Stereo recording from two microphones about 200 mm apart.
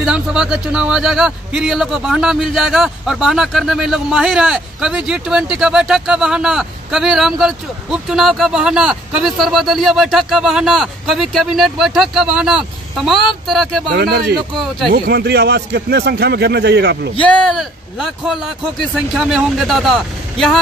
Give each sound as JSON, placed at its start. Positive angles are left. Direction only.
{"t": 0.0, "sound": "a man's voice", "side_deg": -5}
{"t": 13.9, "sound": "a man's voice", "side_deg": -55}
{"t": 17.2, "sound": "a man's voice", "side_deg": 5}